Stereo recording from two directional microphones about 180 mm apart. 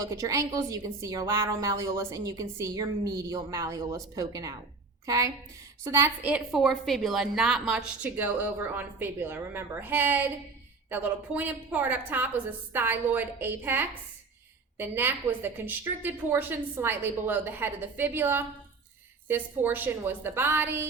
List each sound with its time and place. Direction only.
0.0 s a woman's voice: 20° right (ahead or behind)